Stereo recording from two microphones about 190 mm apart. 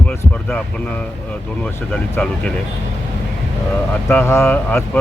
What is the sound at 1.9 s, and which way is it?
Speech, 5° left (ahead or behind).